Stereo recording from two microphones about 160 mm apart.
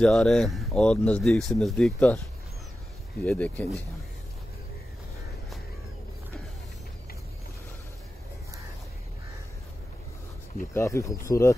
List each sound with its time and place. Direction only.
0.0 s speech: 5° left (ahead or behind)
3.3 s speech: 10° left (ahead or behind)
10.7 s speech: 20° left (ahead or behind)